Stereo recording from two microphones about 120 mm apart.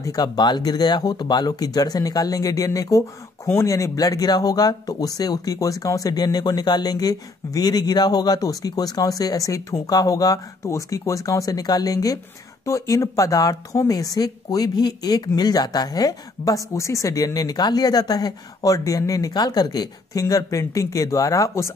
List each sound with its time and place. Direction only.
0.0 s speech: 35° left (ahead or behind)